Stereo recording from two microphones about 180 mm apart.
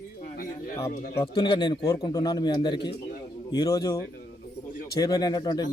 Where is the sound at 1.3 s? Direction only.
30° left (ahead or behind).